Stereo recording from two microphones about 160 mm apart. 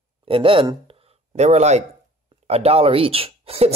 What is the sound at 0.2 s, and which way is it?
Speech, 35° right (ahead or behind).